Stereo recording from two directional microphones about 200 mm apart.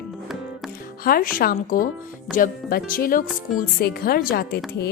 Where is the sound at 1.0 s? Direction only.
45° left (ahead or behind).